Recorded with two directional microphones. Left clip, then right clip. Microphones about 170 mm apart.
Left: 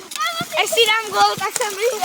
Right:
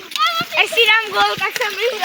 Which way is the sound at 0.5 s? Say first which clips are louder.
Right 2 dB; 90° left.